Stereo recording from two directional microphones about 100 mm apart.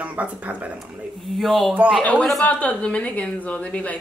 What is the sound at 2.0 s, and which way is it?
A woman's voice, 15° left (ahead or behind).